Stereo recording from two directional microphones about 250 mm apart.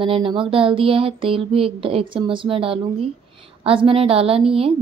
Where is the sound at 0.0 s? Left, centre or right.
Right.